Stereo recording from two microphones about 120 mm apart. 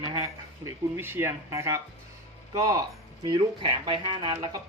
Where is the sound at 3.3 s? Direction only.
45° right (ahead or behind).